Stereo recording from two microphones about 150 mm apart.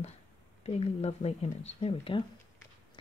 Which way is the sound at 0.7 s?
45° left (ahead or behind).